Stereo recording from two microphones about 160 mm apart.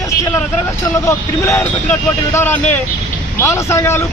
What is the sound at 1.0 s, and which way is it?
Speech, 15° left (ahead or behind).